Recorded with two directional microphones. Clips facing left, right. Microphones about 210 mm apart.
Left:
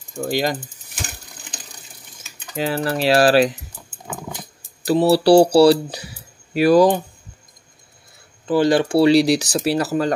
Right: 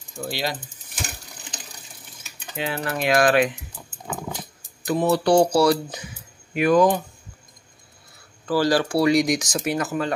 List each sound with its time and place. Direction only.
0.1 s mechanisms: 45° left (ahead or behind)
2.5 s speech: 40° left (ahead or behind)
4.8 s speech: 35° left (ahead or behind)
8.5 s speech: 25° left (ahead or behind); by 10.1 s 40° left (ahead or behind)